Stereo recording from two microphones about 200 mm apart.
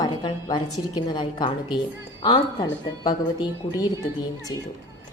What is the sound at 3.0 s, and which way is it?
A woman's voice, 20° left (ahead or behind).